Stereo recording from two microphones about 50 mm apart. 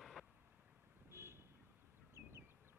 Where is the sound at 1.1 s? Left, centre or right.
Right.